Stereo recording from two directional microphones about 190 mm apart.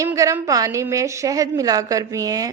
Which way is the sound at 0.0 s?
15° right (ahead or behind).